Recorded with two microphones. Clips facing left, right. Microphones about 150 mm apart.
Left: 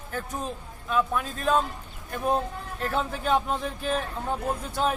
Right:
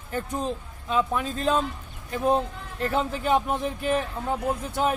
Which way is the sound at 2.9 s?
15° right (ahead or behind).